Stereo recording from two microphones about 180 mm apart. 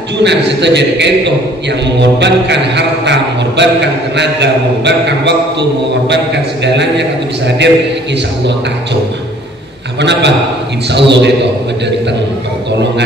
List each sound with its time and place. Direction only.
0.2 s music: 75° right (ahead or behind)
9.9 s music: 75° right (ahead or behind)